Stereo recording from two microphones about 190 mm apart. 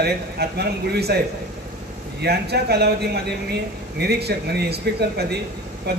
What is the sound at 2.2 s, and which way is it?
A man's voice, 60° right (ahead or behind).